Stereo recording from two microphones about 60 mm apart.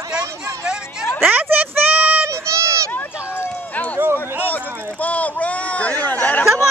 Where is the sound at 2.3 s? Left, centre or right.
Right.